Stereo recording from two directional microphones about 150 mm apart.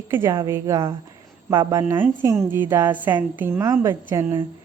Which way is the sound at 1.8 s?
15° right (ahead or behind).